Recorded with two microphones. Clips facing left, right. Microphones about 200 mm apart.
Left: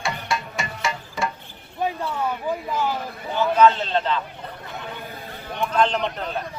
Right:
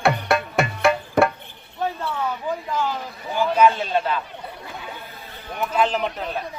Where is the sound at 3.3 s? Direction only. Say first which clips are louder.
Left 1 dB; 10° right (ahead or behind).